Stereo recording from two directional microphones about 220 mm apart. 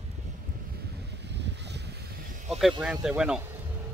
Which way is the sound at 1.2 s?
50° right (ahead or behind).